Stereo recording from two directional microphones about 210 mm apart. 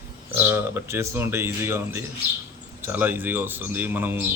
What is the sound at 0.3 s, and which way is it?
Speech, 10° right (ahead or behind).